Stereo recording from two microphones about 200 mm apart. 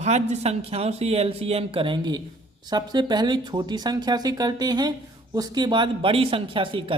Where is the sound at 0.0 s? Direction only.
35° right (ahead or behind).